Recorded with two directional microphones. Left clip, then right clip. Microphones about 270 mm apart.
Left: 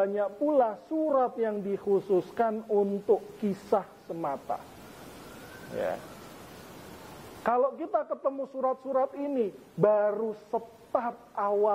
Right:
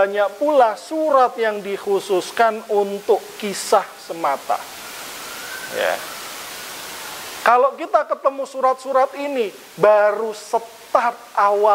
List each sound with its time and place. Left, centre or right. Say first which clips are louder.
0.0 s a woman's voice: right 10 dB; centre
2.7 s speech: right 8 dB; right
3.3 s a woman's voice: right 11 dB; centre
5.7 s a woman's voice: right 11 dB; centre
7.4 s a woman's voice: right 12 dB; centre